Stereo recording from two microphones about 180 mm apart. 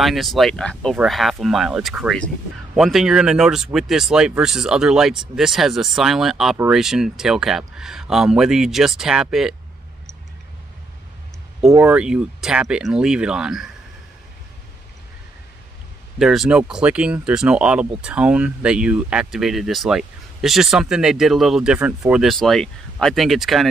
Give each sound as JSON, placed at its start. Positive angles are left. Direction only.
{"t": 0.0, "sound": "speech", "side_deg": 0}
{"t": 11.8, "sound": "speech", "side_deg": -5}
{"t": 16.2, "sound": "speech", "side_deg": 0}